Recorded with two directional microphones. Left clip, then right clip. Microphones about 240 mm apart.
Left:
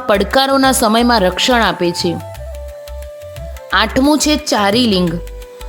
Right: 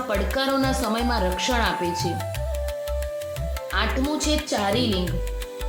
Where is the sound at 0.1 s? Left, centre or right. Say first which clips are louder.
Left 13 dB; left.